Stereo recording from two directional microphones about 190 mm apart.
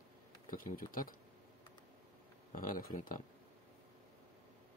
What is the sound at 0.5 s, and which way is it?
Speech, 45° left (ahead or behind).